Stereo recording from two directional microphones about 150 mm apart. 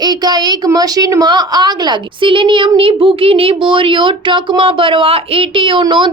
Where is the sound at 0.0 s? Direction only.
25° right (ahead or behind).